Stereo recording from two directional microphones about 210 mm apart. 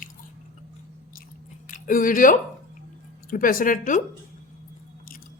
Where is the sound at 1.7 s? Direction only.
40° left (ahead or behind).